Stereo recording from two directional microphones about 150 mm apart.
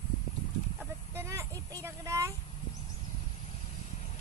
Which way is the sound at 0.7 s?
15° right (ahead or behind).